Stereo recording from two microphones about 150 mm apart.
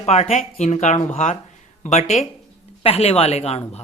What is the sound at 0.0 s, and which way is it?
Speech, 45° left (ahead or behind).